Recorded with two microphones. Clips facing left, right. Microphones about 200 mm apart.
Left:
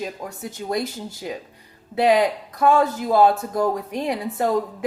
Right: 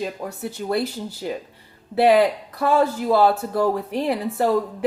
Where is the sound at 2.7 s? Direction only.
35° right (ahead or behind).